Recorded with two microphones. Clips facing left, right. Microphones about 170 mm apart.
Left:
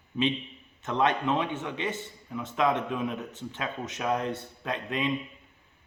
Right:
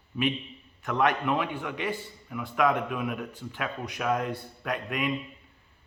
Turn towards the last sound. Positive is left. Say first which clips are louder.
# even
turn(degrees=25)  # may be behind; listen again after turning